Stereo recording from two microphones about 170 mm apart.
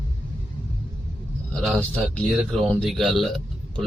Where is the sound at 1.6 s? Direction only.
Centre (ahead or behind).